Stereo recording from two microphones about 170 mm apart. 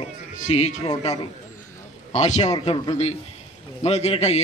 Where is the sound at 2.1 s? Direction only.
40° left (ahead or behind).